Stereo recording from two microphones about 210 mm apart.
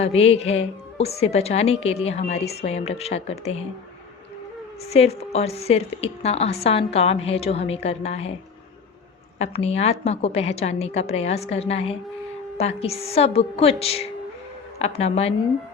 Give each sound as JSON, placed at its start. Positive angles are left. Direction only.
{"t": 0.0, "sound": "a woman's voice", "side_deg": 30}
{"t": 4.9, "sound": "a woman's voice", "side_deg": 30}
{"t": 9.4, "sound": "a woman's voice", "side_deg": 30}